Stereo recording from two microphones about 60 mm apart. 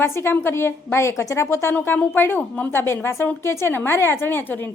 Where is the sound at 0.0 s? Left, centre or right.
Left.